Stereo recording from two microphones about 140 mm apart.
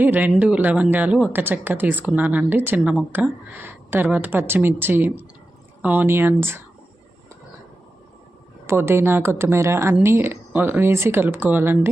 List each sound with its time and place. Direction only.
0.0 s speech: 10° right (ahead or behind)
8.6 s speech: 15° right (ahead or behind)